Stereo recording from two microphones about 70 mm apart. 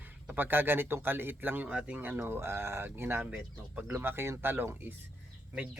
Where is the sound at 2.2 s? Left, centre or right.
Right.